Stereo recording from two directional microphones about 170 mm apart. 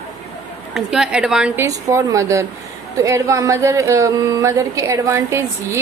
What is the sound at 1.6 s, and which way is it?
Speech, 15° right (ahead or behind).